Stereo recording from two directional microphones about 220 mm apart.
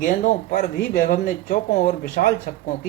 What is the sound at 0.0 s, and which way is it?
A man's voice, 40° left (ahead or behind).